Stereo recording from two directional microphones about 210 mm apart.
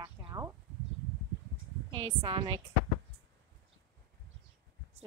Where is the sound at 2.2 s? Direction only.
25° right (ahead or behind).